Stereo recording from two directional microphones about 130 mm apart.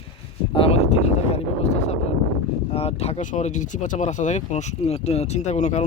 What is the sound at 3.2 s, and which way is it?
Speech, 70° left (ahead or behind).